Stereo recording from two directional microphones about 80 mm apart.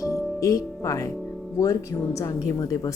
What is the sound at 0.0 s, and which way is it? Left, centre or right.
Music, left.